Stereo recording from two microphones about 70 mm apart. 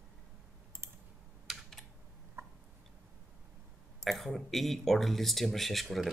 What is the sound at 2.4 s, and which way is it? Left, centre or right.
Tick-tock, right.